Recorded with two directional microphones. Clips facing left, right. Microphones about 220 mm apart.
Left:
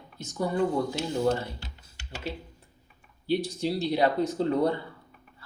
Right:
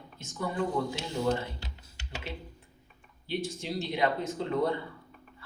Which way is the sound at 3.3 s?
35° left (ahead or behind).